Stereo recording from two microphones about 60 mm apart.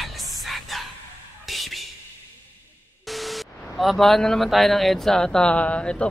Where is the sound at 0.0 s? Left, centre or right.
Centre.